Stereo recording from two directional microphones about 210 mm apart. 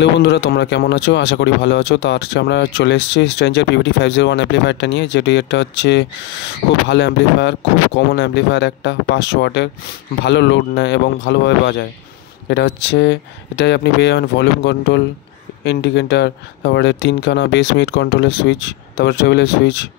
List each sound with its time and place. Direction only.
0.0 s speech: 55° left (ahead or behind)